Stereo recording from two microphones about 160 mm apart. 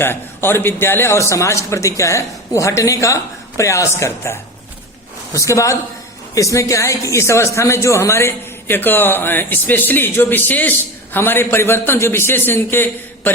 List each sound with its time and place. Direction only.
0.0 s a man's voice: 15° left (ahead or behind)